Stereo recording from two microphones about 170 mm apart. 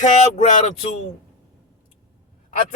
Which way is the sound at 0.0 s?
45° left (ahead or behind).